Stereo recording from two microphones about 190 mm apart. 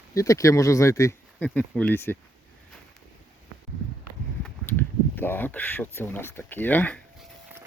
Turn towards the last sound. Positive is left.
turn(degrees=10)  # may be behind; listen again after turning